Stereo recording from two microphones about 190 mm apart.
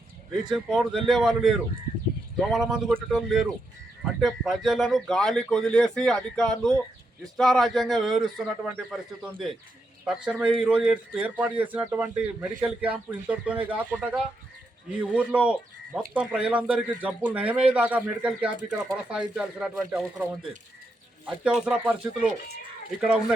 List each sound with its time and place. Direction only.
0.5 s a man's voice: 5° right (ahead or behind)
21.4 s speech: 5° right (ahead or behind)